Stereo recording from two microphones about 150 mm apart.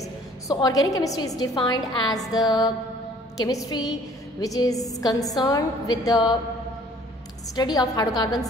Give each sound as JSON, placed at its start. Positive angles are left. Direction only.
{"t": 0.0, "sound": "a woman's voice", "side_deg": 25}
{"t": 7.5, "sound": "a woman's voice", "side_deg": 25}